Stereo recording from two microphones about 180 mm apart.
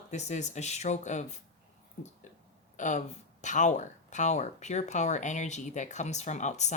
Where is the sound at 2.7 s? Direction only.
45° left (ahead or behind).